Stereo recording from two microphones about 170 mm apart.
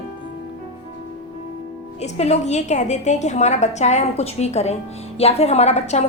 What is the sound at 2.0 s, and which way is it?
A woman's voice, 40° left (ahead or behind).